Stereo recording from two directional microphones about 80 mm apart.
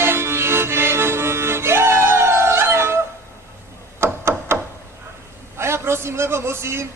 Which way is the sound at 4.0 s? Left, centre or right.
Right.